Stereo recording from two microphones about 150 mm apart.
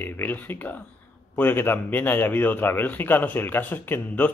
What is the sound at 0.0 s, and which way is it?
A man's voice, 15° left (ahead or behind).